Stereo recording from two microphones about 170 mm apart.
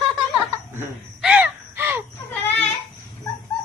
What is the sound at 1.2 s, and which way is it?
Caw, 5° right (ahead or behind).